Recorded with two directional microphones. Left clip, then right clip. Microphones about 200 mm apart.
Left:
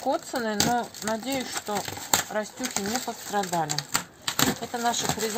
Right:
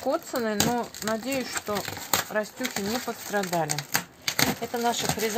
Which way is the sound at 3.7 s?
10° right (ahead or behind).